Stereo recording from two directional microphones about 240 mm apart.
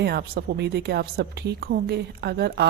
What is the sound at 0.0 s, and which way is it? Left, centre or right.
Speech, right.